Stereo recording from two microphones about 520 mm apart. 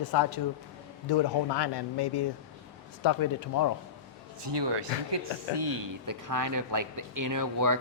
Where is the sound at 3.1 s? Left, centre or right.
Left.